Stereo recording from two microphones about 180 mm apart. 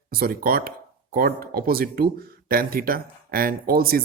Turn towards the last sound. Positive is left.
turn(degrees=-55)  # may be behind; listen again after turning